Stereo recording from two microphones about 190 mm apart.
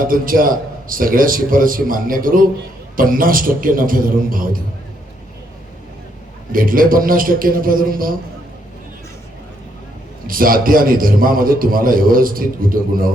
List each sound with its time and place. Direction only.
0.0 s a man's voice: 45° right (ahead or behind)
6.5 s a man's voice: 50° right (ahead or behind)
10.2 s a man's voice: 50° right (ahead or behind)